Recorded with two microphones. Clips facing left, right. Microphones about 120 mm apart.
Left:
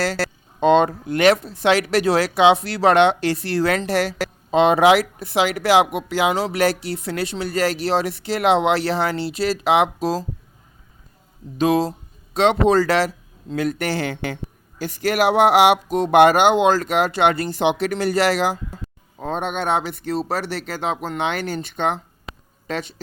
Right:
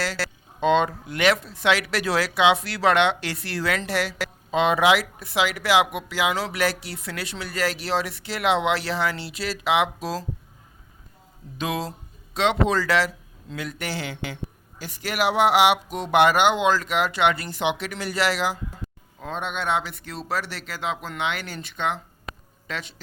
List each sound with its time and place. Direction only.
0.0 s speech: 40° left (ahead or behind)
11.5 s speech: 35° left (ahead or behind)